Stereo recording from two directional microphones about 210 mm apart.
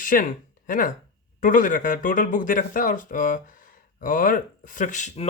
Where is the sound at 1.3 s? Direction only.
40° left (ahead or behind).